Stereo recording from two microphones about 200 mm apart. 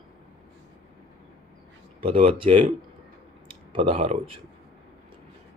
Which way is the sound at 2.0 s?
30° right (ahead or behind).